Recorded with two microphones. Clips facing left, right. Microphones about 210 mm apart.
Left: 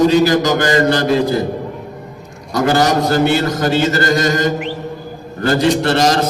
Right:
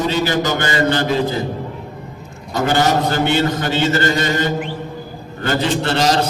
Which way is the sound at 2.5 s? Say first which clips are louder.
Left 2 dB; 40° left (ahead or behind).